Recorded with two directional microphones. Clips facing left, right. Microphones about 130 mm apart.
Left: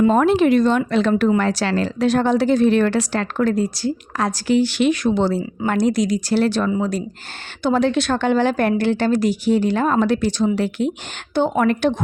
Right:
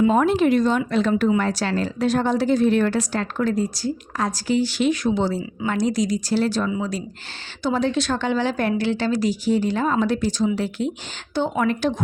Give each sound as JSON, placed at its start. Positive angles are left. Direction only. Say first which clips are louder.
{"t": 0.0, "sound": "a woman's voice", "louder": "left 3 dB", "side_deg": 80}
{"t": 6.7, "sound": "speech", "louder": "left 4 dB", "side_deg": 45}
{"t": 7.6, "sound": "speech", "louder": "left 4 dB", "side_deg": 65}